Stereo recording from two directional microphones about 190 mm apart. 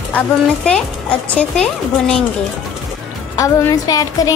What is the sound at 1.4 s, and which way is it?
Speech, 5° left (ahead or behind).